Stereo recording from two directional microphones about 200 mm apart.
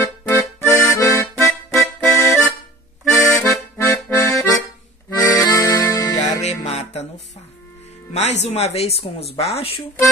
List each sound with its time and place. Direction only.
0.0 s accordion: 15° left (ahead or behind)
1.5 s accordion: centre (ahead or behind)
3.2 s music: 15° left (ahead or behind)
6.1 s music: 35° left (ahead or behind)
8.1 s speech: 35° left (ahead or behind)